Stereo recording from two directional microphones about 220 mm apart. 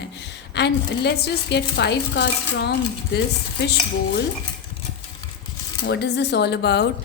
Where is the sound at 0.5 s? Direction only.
50° left (ahead or behind).